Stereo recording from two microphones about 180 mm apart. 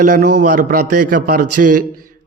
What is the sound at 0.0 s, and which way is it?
A man's voice, 45° right (ahead or behind).